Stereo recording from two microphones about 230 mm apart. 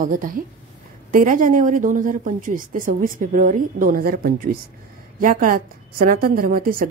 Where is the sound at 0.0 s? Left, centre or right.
Right.